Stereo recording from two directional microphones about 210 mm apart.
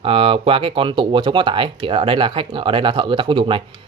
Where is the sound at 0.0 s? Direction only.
25° right (ahead or behind).